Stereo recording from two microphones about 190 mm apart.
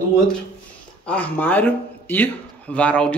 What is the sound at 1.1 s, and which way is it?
Speech, 10° left (ahead or behind).